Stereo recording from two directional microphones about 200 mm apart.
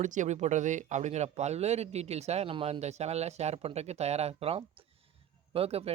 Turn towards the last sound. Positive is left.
turn(degrees=-30)  # may be behind; listen again after turning